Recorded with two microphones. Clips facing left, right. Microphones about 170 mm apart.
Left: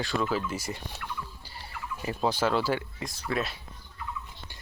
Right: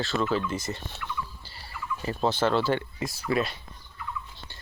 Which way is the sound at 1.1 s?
15° left (ahead or behind).